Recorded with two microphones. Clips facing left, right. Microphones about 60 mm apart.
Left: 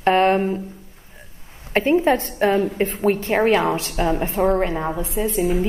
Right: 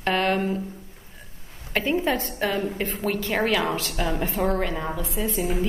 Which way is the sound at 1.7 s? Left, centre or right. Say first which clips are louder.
Left 7 dB; left.